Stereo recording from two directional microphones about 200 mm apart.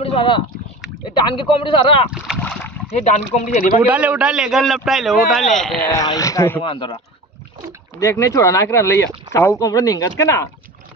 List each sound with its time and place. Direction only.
0.0 s rowboat: 25° left (ahead or behind)
1.3 s speech: 25° left (ahead or behind)
2.0 s a man's voice: 5° right (ahead or behind)
3.0 s speech: 40° left (ahead or behind)
3.8 s a man's voice: 5° right (ahead or behind)
5.9 s speech: 15° left (ahead or behind)
6.6 s speech: 25° left (ahead or behind)
8.0 s speech: 15° left (ahead or behind)